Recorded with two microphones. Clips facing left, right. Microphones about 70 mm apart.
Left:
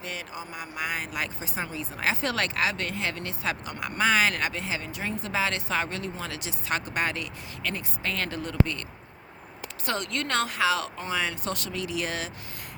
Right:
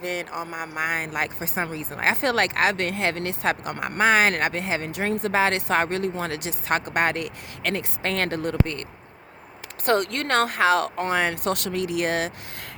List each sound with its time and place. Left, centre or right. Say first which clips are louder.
0.0 s speech: right 7 dB; right
9.8 s speech: right 8 dB; right